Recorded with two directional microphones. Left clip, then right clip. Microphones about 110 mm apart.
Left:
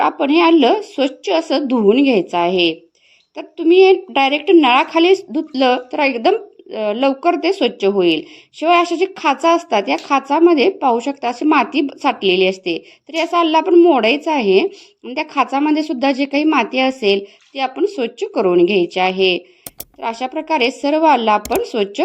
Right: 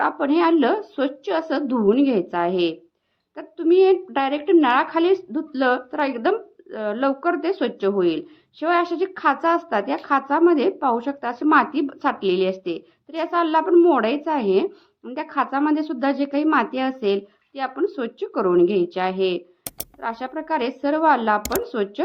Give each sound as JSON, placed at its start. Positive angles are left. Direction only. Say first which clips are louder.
{"t": 0.0, "sound": "a woman's voice", "louder": "left 6 dB", "side_deg": 45}
{"t": 14.0, "sound": "a woman's voice", "louder": "left 6 dB", "side_deg": 50}